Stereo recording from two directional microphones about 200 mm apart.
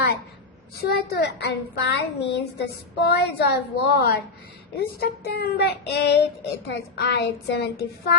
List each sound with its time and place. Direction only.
0.8 s a child's voice: 50° left (ahead or behind)
4.9 s child singing: 50° left (ahead or behind)
6.7 s a child's voice: 55° left (ahead or behind)